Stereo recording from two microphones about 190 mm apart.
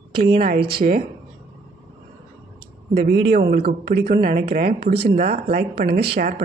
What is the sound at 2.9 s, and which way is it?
Speech, 50° right (ahead or behind).